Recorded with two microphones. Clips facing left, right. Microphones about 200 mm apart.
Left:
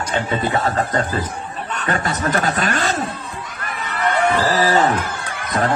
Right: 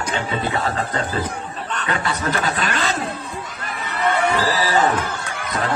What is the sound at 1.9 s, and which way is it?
Speech, 45° left (ahead or behind).